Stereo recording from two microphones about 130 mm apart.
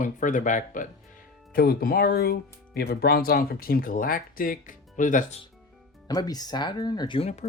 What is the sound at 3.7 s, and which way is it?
Speech, 90° left.